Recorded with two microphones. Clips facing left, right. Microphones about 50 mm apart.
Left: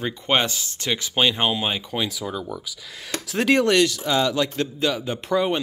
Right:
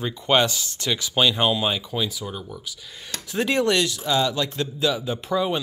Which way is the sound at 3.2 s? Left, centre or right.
Left.